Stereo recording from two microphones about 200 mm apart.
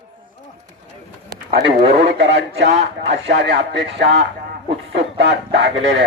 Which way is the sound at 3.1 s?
55° right (ahead or behind).